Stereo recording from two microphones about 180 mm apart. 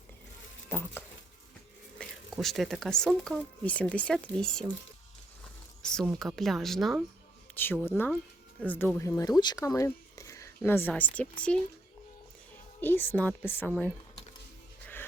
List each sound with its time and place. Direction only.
0.7 s a woman's voice: 10° left (ahead or behind)
5.8 s speech: 5° left (ahead or behind)
7.5 s a woman's voice: 10° left (ahead or behind)
12.8 s a woman's voice: 10° left (ahead or behind)